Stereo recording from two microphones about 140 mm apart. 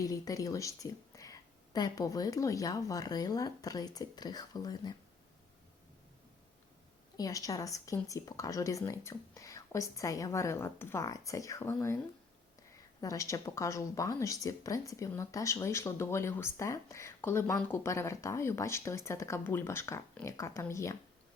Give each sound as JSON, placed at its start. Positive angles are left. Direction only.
{"t": 0.0, "sound": "speech", "side_deg": 25}
{"t": 7.2, "sound": "speech", "side_deg": 25}
{"t": 13.0, "sound": "speech", "side_deg": 25}